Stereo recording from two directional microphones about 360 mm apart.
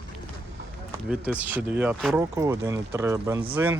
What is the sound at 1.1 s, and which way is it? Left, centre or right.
Speech, centre.